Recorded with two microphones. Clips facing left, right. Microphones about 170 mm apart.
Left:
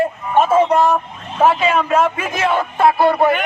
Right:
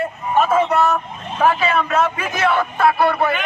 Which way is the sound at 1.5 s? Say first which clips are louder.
Left 2 dB; 15° left (ahead or behind).